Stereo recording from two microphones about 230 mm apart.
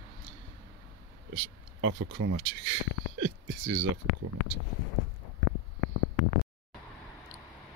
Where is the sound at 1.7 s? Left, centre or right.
Right.